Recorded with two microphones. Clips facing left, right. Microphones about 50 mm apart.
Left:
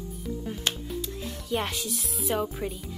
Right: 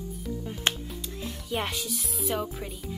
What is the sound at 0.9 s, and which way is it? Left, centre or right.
Speech, centre.